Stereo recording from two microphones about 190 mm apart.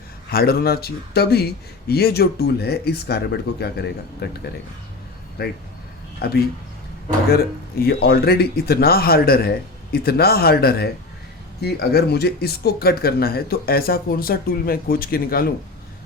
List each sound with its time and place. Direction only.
0.3 s a man's voice: 55° left (ahead or behind)
6.2 s a man's voice: 55° left (ahead or behind)